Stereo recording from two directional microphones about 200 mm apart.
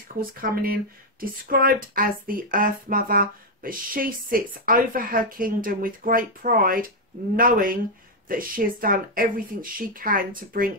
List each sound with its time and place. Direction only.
0.3 s speech: 50° right (ahead or behind)